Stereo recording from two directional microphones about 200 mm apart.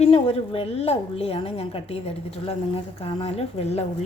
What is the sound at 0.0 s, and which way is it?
A woman's voice, 30° left (ahead or behind).